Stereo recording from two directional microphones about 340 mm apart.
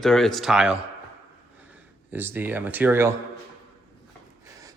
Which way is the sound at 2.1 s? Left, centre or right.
Centre.